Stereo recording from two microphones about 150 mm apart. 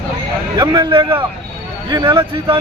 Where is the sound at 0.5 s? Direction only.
25° right (ahead or behind).